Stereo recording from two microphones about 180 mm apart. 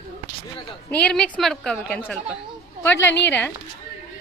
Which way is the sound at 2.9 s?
80° left.